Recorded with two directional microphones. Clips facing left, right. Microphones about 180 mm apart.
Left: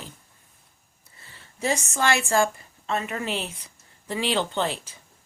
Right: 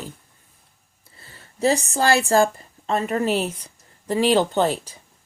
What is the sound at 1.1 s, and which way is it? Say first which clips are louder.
A woman's voice: right 8 dB; 40° right (ahead or behind).